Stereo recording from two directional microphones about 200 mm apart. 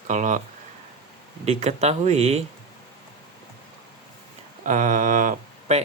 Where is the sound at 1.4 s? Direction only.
35° right (ahead or behind).